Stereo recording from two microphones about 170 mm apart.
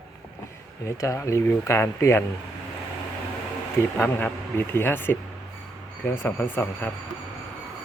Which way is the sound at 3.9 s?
10° left (ahead or behind).